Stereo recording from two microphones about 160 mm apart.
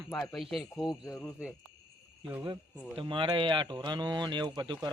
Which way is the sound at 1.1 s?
15° left (ahead or behind).